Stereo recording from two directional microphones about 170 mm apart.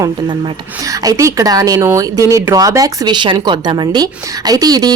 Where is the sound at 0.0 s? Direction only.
25° right (ahead or behind).